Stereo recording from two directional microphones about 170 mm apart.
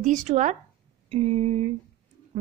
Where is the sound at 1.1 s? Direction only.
35° right (ahead or behind).